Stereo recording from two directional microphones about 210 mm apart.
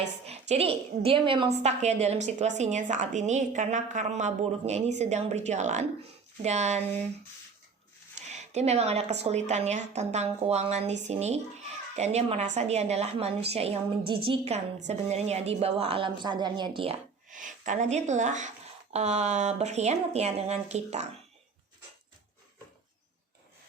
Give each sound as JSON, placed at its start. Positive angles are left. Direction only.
{"t": 0.3, "sound": "a woman's voice", "side_deg": -30}
{"t": 8.3, "sound": "a woman's voice", "side_deg": -30}